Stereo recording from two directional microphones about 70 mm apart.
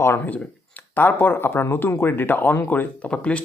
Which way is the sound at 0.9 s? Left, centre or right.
Left.